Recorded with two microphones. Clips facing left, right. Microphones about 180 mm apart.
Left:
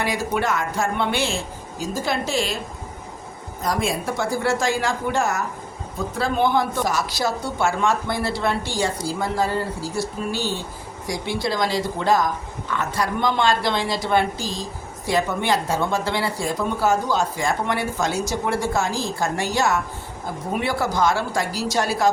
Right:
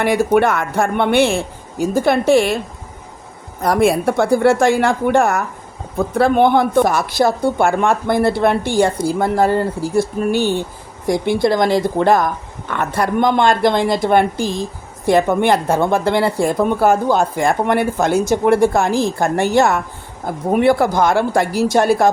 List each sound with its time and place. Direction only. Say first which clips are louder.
0.0 s speech: right 9 dB; 60° right (ahead or behind)
3.6 s speech: right 9 dB; 60° right (ahead or behind)